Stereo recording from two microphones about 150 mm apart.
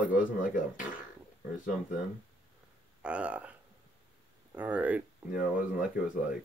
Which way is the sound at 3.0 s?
10° right (ahead or behind).